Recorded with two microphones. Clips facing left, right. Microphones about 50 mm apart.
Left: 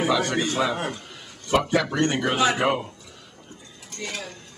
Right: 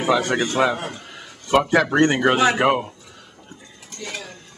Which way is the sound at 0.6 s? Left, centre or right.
Right.